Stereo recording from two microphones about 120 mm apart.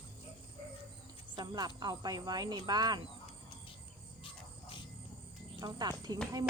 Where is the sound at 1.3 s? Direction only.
35° right (ahead or behind).